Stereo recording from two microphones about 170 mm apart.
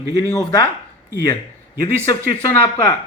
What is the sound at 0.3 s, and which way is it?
Speech, 10° left (ahead or behind).